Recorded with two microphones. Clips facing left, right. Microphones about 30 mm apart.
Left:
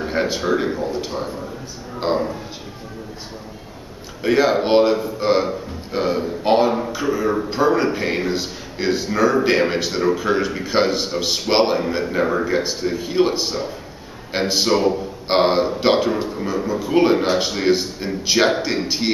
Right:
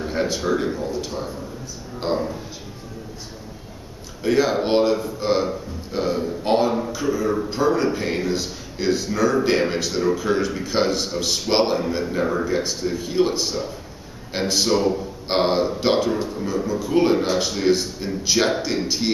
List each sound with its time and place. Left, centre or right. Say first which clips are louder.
0.0 s a man's voice: left 2 dB; centre
4.2 s a man's voice: left 3 dB; centre